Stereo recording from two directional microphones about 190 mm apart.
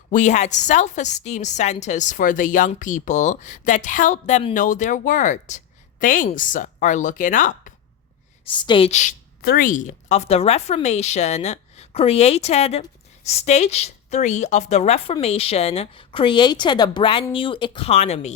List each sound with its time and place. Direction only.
0.1 s a woman's voice: 40° left (ahead or behind)
8.4 s a woman's voice: 25° left (ahead or behind)
9.4 s a woman's voice: 50° left (ahead or behind)